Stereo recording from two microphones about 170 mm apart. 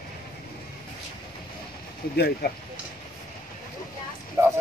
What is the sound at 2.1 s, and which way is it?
Speech, 65° left (ahead or behind).